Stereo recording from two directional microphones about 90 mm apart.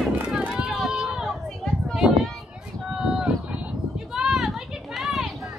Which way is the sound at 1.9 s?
5° right (ahead or behind).